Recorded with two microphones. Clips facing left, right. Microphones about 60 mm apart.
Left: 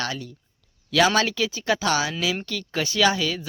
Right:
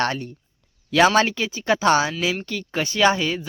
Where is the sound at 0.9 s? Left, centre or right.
Right.